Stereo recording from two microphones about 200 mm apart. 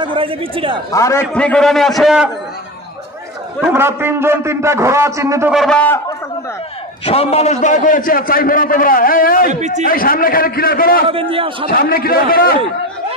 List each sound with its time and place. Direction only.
0.0 s a man's voice: 25° right (ahead or behind)
0.9 s a man's voice: 15° left (ahead or behind)
3.6 s a man's voice: 10° right (ahead or behind)
5.5 s a man's voice: centre (ahead or behind)
7.1 s a man's voice: 30° left (ahead or behind)
9.5 s speech: 35° right (ahead or behind)
9.8 s a man's voice: 45° left (ahead or behind)
11.1 s a man's voice: 25° right (ahead or behind)
11.6 s a man's voice: 50° left (ahead or behind)